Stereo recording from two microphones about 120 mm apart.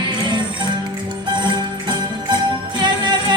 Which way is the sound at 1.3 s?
40° right (ahead or behind).